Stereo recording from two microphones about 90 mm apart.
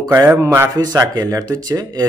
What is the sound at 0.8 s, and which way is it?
Speech, 45° right (ahead or behind).